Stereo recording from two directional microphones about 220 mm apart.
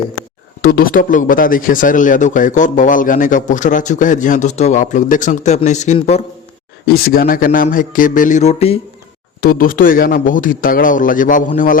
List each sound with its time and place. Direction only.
0.6 s speech: 45° left (ahead or behind)
6.8 s speech: 45° left (ahead or behind)
9.4 s speech: 40° left (ahead or behind)